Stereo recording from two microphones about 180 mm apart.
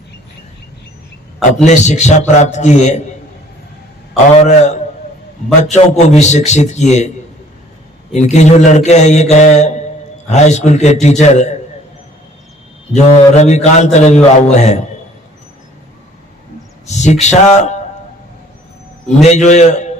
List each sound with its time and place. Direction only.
1.6 s a man's voice: 40° left (ahead or behind)
4.1 s a man's voice: 40° left (ahead or behind)
8.1 s a man's voice: 40° left (ahead or behind)
12.9 s a man's voice: 40° left (ahead or behind)
16.8 s a man's voice: 40° left (ahead or behind)
19.2 s a man's voice: 40° left (ahead or behind)